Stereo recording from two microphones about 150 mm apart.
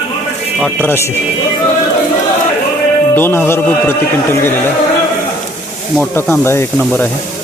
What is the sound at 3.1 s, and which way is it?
A man's voice, 15° left (ahead or behind).